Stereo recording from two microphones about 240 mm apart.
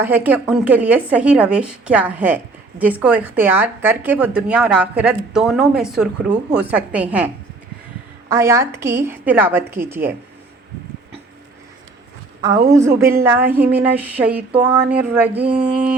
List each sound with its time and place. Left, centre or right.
0.0 s a woman's voice: centre
8.3 s a woman's voice: centre
12.8 s a woman's voice: centre